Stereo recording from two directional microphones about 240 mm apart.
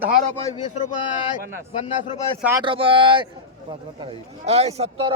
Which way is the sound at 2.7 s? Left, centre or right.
Right.